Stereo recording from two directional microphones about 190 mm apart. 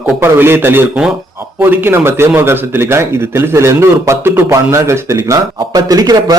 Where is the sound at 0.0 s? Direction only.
10° right (ahead or behind).